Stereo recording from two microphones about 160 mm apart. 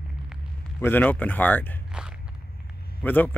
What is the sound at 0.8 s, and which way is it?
Speech, 10° left (ahead or behind).